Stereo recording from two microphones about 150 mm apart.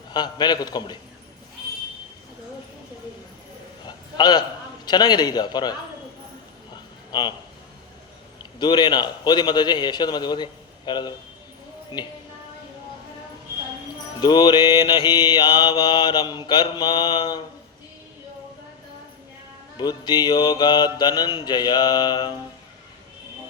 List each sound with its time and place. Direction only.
0.1 s mantra: 30° left (ahead or behind)
3.8 s a sound: 30° left (ahead or behind)
4.9 s mantra: 30° left (ahead or behind)
7.1 s a man's voice: 30° left (ahead or behind)
8.5 s mantra: 30° left (ahead or behind)
14.2 s mantra: 30° left (ahead or behind)
19.7 s mantra: 30° left (ahead or behind)